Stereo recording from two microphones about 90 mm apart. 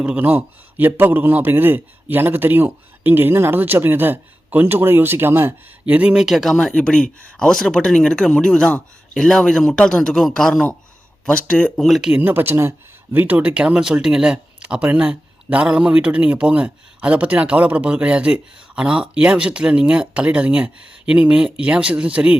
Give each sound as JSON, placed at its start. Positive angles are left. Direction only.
{"t": 0.0, "sound": "a man's voice", "side_deg": -15}
{"t": 5.8, "sound": "a man's voice", "side_deg": -15}
{"t": 12.1, "sound": "a man's voice", "side_deg": -20}